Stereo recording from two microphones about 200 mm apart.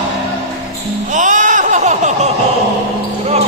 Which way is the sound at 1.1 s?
40° right (ahead or behind).